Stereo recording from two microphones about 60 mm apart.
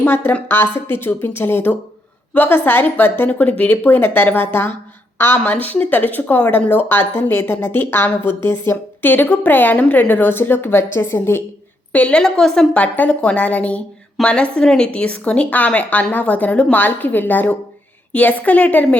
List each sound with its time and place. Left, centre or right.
0.0 s speech: left
5.5 s speech: left
9.0 s speech: left
11.9 s a woman's voice: left
12.4 s a woman's voice: centre
12.7 s a woman's voice: left